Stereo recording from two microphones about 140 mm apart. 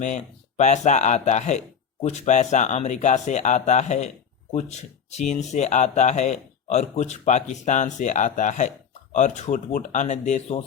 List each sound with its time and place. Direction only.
0.0 s speech: 55° left (ahead or behind)
5.1 s speech: 55° left (ahead or behind)